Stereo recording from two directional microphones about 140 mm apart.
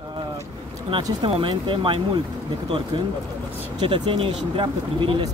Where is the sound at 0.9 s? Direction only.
40° right (ahead or behind).